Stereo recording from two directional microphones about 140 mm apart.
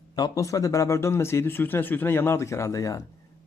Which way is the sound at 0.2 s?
25° left (ahead or behind).